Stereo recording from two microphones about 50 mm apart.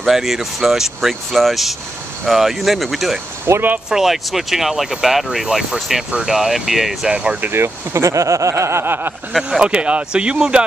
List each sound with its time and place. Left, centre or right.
0.0 s speech: centre
3.5 s speech: right
3.9 s speech: centre
7.1 s speech: right
7.5 s speech: right
8.8 s a sound: right
9.4 s speech: centre